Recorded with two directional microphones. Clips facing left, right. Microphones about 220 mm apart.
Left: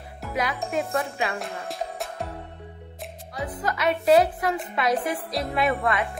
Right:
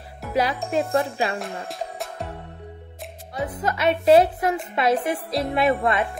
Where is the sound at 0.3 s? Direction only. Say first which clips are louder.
Right 5 dB; 30° right (ahead or behind).